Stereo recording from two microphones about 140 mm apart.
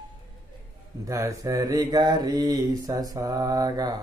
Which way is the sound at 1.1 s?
25° right (ahead or behind).